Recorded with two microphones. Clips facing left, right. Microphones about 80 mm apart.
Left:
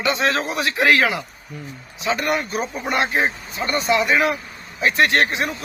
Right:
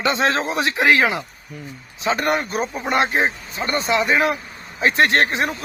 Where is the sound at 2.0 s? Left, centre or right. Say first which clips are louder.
Right 1 dB; right.